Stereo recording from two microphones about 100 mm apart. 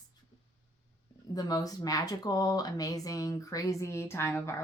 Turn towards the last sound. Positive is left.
turn(degrees=25)  # may be behind; listen again after turning